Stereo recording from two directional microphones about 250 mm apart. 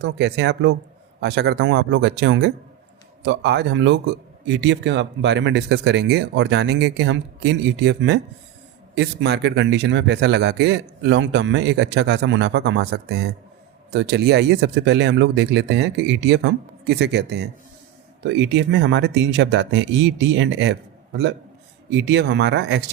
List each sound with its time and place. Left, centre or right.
0.0 s a man's voice: right